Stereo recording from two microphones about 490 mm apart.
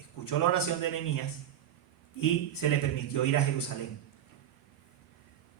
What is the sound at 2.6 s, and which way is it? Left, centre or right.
Speech, left.